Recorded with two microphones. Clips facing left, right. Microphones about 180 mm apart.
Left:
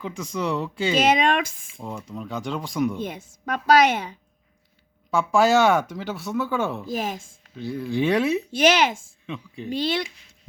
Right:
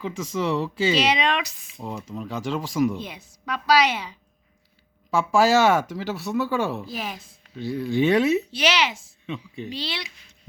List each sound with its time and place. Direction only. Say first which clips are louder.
0.0 s speech: right 1 dB; 5° right (ahead or behind)
0.9 s a woman's voice: left 7 dB; 50° left (ahead or behind)
1.8 s speech: right 1 dB; 5° right (ahead or behind)
3.0 s a woman's voice: left 6 dB; 50° left (ahead or behind)
5.1 s speech: even; 5° right (ahead or behind)
6.8 s a woman's voice: left 5 dB; 45° left (ahead or behind)
7.5 s speech: right 2 dB; centre (ahead or behind)
8.4 s a woman's voice: left 5 dB; 50° left (ahead or behind)